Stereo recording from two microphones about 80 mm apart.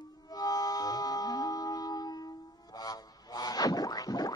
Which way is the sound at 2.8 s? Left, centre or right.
Left.